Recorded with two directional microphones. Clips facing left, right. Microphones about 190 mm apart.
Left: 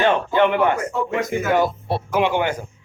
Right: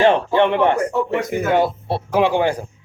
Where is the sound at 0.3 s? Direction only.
25° right (ahead or behind).